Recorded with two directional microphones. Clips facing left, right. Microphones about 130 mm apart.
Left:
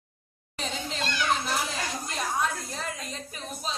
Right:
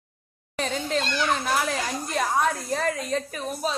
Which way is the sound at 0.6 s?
50° right (ahead or behind).